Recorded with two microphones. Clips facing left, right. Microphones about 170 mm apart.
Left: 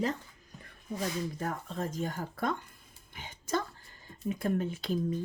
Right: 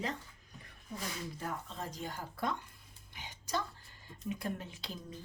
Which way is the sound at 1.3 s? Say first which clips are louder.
Left 6 dB; 50° left (ahead or behind).